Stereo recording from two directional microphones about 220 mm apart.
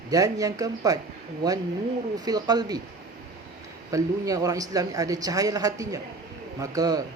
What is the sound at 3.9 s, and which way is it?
Speech, 15° right (ahead or behind).